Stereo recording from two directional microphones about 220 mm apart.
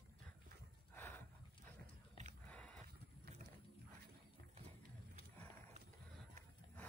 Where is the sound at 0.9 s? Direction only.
10° left (ahead or behind).